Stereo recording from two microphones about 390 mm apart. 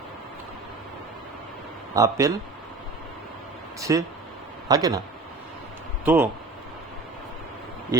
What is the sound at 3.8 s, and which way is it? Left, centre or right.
A man's voice, centre.